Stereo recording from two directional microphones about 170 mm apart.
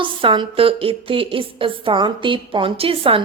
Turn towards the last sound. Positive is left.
turn(degrees=-30)  # may be behind; listen again after turning